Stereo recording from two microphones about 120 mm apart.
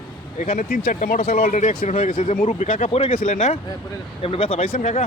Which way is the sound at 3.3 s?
70° left (ahead or behind).